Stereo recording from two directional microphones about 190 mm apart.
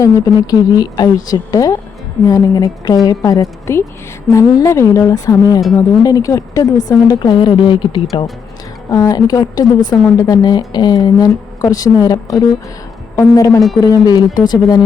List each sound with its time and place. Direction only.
0.7 s a woman's voice: 20° left (ahead or behind)